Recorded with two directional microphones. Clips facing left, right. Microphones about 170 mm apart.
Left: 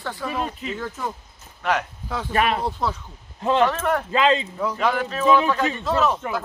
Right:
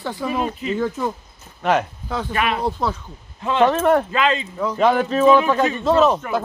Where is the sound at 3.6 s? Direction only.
25° right (ahead or behind).